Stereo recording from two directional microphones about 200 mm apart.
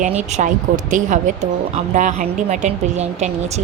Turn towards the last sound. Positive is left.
turn(degrees=-35)  # may be behind; listen again after turning